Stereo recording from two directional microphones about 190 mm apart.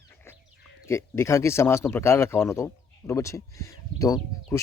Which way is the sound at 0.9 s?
15° left (ahead or behind).